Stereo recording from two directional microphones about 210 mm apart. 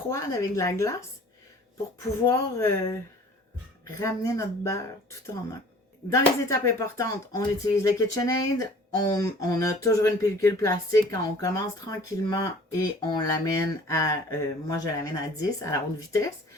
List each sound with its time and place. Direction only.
0.1 s speech: 15° left (ahead or behind)
2.2 s speech: 15° left (ahead or behind)